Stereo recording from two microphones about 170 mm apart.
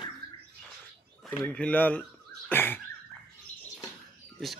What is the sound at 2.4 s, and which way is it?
Cough, 10° left (ahead or behind).